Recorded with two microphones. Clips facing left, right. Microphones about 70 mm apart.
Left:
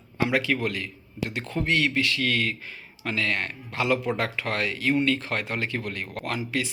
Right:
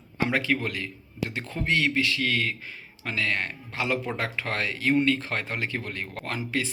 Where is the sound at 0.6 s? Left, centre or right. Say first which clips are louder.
Left 2 dB; right.